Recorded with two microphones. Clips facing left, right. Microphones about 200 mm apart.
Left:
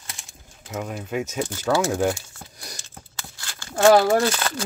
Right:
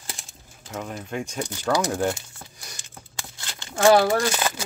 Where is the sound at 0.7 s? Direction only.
5° left (ahead or behind).